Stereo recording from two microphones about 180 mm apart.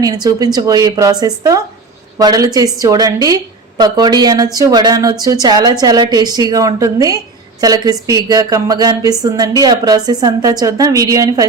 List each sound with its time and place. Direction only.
0.0 s a woman's voice: 20° right (ahead or behind)